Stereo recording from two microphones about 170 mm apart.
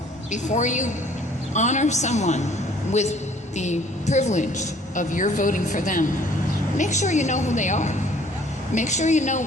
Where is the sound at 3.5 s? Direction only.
45° left (ahead or behind).